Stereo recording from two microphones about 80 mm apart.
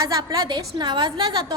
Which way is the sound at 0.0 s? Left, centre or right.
Right.